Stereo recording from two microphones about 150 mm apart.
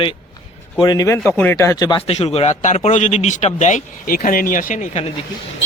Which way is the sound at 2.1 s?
45° left (ahead or behind).